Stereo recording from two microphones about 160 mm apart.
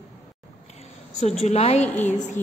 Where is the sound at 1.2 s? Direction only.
40° left (ahead or behind).